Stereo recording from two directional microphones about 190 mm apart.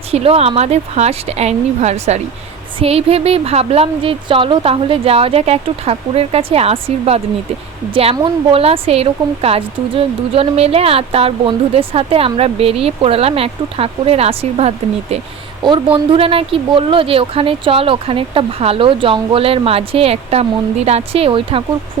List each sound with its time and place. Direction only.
0.1 s speech: 30° right (ahead or behind)